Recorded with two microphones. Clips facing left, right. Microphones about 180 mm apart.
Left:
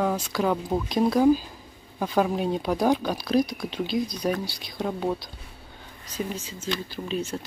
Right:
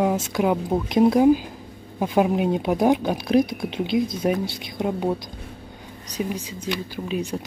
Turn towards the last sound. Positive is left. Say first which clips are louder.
# right 3 dB
turn(degrees=-15)  # may be behind; listen again after turning